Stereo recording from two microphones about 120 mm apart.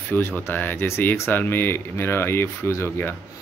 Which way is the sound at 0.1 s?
15° left (ahead or behind).